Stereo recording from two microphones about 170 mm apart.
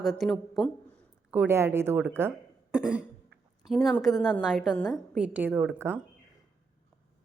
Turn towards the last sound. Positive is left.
turn(degrees=-10)  # may be behind; listen again after turning